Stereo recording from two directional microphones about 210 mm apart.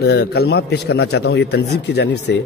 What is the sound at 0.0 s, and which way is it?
Speech, 50° left (ahead or behind).